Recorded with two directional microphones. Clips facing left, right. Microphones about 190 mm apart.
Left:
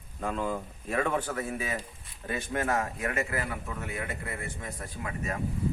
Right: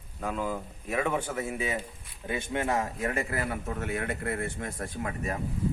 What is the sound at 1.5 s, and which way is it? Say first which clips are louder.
A man's voice: right 2 dB; 20° right (ahead or behind).